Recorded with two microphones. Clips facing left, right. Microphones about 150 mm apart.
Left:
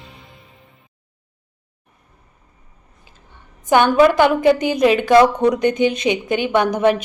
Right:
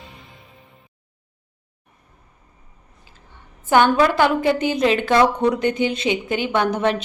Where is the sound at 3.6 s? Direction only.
15° left (ahead or behind).